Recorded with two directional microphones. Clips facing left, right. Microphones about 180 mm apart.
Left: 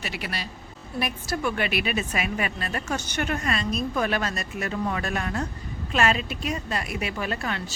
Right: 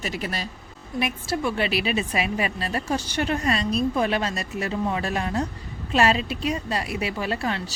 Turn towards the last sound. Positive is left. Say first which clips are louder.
# right 3 dB
turn(degrees=-30)  # may be behind; listen again after turning